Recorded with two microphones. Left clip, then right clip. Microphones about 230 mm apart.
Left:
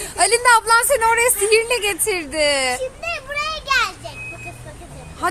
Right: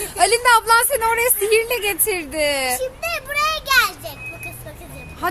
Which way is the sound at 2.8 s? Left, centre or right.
Right.